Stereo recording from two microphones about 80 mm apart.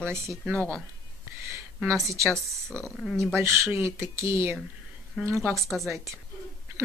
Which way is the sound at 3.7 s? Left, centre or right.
Right.